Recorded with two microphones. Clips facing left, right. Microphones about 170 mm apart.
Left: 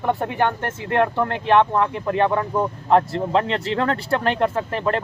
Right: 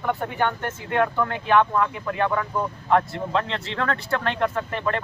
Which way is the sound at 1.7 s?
25° left (ahead or behind).